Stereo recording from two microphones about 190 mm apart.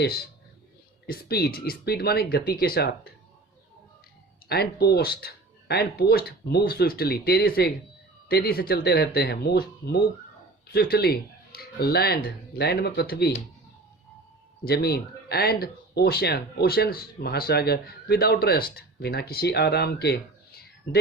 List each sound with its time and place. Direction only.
1.0 s speech: 55° left (ahead or behind)
4.4 s speech: 55° left (ahead or behind)
14.6 s speech: 55° left (ahead or behind)